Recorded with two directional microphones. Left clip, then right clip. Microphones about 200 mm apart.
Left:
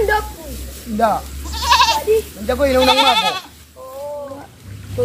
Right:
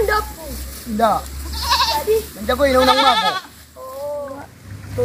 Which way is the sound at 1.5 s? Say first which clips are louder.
Left 5 dB; 30° left (ahead or behind).